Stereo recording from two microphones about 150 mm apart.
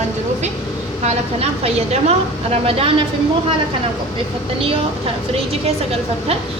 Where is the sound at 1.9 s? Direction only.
45° right (ahead or behind).